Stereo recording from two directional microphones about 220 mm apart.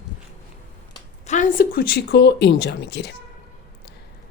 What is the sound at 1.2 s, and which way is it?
A woman's voice, 35° left (ahead or behind).